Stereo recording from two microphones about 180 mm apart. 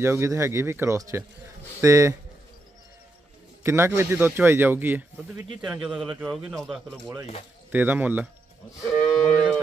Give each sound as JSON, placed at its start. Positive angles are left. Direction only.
{"t": 0.0, "sound": "a man's voice", "side_deg": -15}
{"t": 3.6, "sound": "a man's voice", "side_deg": -15}
{"t": 7.7, "sound": "a man's voice", "side_deg": -10}
{"t": 8.9, "sound": "moo", "side_deg": 5}